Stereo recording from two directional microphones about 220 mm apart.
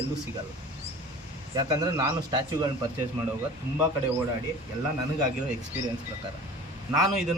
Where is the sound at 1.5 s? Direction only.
15° right (ahead or behind).